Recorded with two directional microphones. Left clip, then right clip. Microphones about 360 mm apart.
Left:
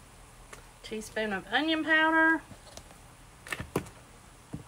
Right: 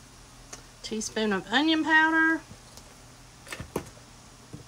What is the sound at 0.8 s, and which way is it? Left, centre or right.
Speech, centre.